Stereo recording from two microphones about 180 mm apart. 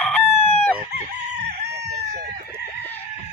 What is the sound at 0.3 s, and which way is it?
Chicken, 35° left (ahead or behind).